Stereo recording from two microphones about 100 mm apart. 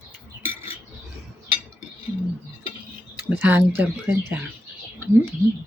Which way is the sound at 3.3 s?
20° right (ahead or behind).